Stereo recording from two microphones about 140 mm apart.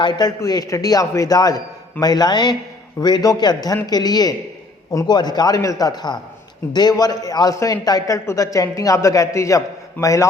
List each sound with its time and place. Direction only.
0.0 s a man's voice: 30° left (ahead or behind)